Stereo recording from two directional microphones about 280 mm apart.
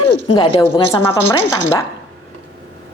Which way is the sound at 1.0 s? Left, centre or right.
Right.